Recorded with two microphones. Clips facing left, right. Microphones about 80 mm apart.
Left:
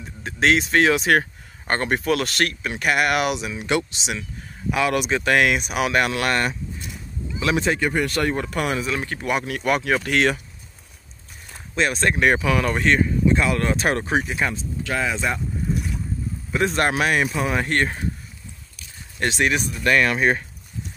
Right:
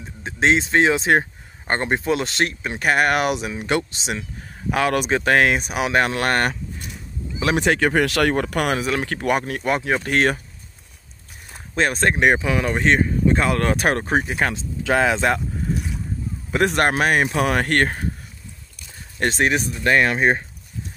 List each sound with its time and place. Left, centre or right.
0.0 s speech: right
7.5 s speech: right
9.3 s speech: right
9.7 s speech: right
10.0 s speech: right
11.7 s speech: right
14.5 s speech: right
16.5 s a man's voice: right
17.4 s speech: right
19.1 s speech: right